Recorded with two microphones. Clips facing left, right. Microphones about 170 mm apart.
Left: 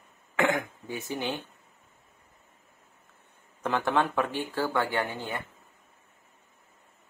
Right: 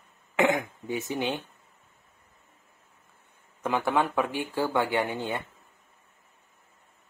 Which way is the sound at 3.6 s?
10° right (ahead or behind).